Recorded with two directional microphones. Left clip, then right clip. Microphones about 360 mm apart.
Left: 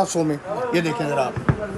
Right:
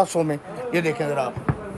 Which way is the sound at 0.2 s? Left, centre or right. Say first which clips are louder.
Even; right.